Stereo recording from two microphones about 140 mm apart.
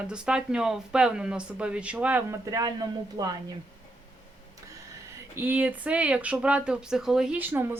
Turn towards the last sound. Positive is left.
turn(degrees=-15)  # may be behind; listen again after turning